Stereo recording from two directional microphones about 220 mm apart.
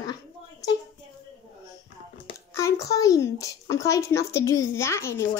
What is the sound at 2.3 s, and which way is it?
Speech, 15° left (ahead or behind).